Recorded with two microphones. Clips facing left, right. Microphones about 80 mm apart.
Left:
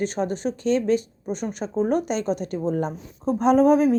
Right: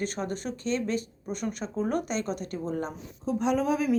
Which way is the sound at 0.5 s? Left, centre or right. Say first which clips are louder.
Left 9 dB; right.